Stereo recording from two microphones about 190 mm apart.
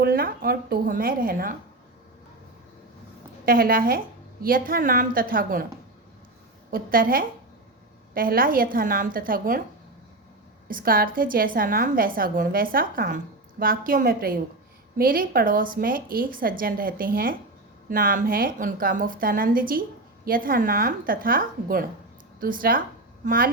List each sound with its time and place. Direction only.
0.0 s a woman's voice: 50° right (ahead or behind)
3.4 s a woman's voice: 50° right (ahead or behind)
6.7 s a woman's voice: 50° right (ahead or behind)
10.7 s a woman's voice: 50° right (ahead or behind)